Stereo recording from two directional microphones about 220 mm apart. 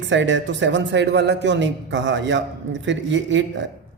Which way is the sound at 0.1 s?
55° right (ahead or behind).